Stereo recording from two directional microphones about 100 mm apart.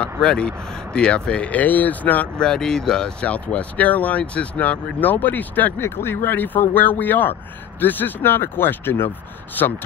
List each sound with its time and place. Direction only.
0.0 s speech: 10° left (ahead or behind)